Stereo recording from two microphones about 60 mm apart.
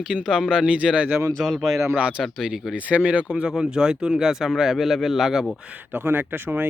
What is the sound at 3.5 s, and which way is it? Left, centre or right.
Speech, centre.